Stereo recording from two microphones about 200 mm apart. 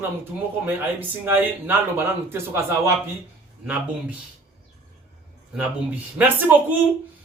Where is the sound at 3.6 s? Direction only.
5° right (ahead or behind).